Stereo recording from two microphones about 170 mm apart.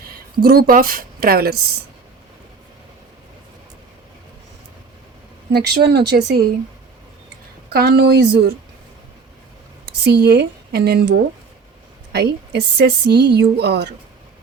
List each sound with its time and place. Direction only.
0.4 s speech: 60° right (ahead or behind)
5.5 s speech: 75° right (ahead or behind)
7.7 s speech: 70° right (ahead or behind)
9.8 s speech: 75° right (ahead or behind)
12.1 s speech: 75° right (ahead or behind)